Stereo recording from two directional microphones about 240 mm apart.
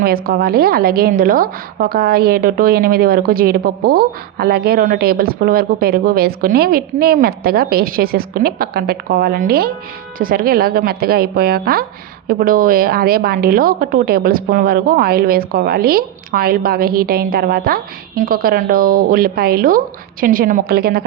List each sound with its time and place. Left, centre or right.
0.0 s a woman's voice: right